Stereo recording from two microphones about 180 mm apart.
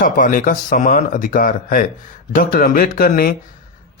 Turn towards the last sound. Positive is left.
turn(degrees=50)  # may be behind; listen again after turning